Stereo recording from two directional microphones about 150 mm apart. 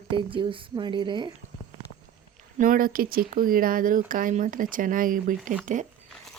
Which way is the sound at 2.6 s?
70° right (ahead or behind).